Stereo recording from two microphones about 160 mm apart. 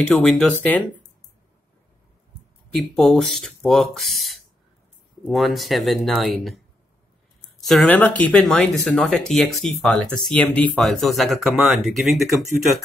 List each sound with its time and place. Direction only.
0.0 s speech: 5° left (ahead or behind)
2.7 s speech: centre (ahead or behind)
7.6 s speech: 5° left (ahead or behind)